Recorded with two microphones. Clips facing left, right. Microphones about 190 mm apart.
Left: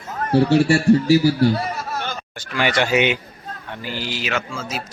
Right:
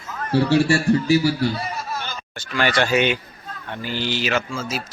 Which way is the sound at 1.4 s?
60° left (ahead or behind).